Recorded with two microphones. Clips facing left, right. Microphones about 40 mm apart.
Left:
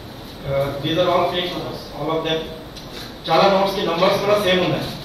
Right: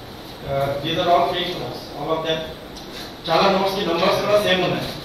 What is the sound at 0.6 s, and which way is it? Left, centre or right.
Speech, right.